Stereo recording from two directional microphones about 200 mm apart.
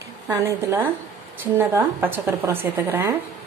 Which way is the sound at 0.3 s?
15° right (ahead or behind).